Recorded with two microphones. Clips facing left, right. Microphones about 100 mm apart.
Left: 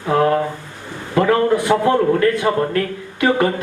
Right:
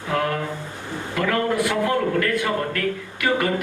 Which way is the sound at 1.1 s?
30° left (ahead or behind).